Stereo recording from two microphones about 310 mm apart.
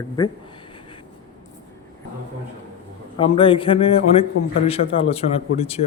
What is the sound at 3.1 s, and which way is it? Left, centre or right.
Speech, centre.